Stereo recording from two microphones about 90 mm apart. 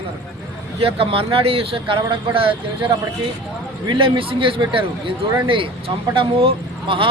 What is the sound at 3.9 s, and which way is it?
Speech, 70° right (ahead or behind).